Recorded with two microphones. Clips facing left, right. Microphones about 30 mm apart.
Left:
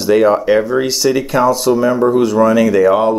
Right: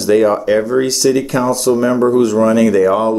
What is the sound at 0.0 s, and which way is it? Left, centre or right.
Speech, centre.